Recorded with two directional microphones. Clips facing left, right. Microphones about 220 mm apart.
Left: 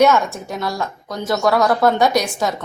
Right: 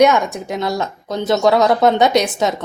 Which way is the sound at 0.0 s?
15° right (ahead or behind).